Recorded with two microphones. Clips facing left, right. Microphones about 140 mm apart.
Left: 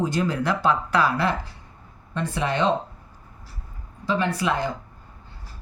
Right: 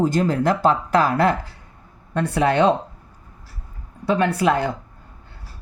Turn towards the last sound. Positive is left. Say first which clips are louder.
# right 5 dB
turn(degrees=-55)  # may be behind; listen again after turning